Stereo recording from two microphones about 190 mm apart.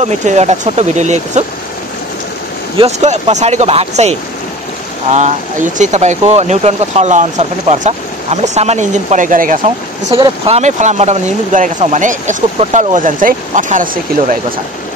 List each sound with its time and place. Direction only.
0.0 s speech: 35° right (ahead or behind)
2.8 s speech: 35° right (ahead or behind)